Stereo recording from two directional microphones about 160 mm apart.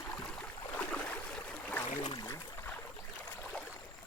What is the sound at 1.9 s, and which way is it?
Boat, 35° left (ahead or behind).